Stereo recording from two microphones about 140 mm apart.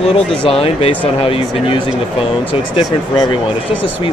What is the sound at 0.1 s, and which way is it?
Speech, 40° left (ahead or behind).